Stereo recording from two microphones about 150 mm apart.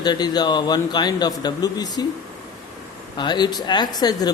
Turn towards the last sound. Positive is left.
turn(degrees=25)  # may be behind; listen again after turning